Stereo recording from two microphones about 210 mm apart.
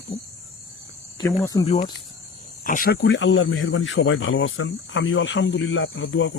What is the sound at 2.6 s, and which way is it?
Speech, 40° left (ahead or behind).